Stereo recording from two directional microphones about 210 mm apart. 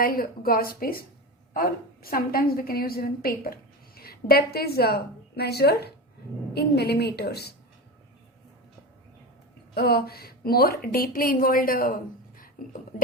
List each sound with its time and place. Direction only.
0.0 s a woman's voice: 45° left (ahead or behind)
9.7 s a woman's voice: 50° left (ahead or behind)
12.6 s a sound: 40° left (ahead or behind)